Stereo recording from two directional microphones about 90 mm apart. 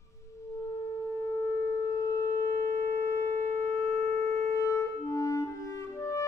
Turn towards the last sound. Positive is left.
turn(degrees=35)  # may be behind; listen again after turning